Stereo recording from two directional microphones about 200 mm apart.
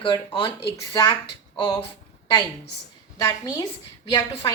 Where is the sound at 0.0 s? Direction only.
25° left (ahead or behind).